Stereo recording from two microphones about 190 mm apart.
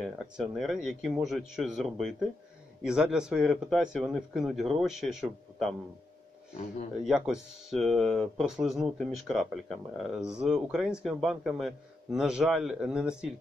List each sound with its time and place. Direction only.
0.0 s speech: centre (ahead or behind)
7.1 s speech: centre (ahead or behind)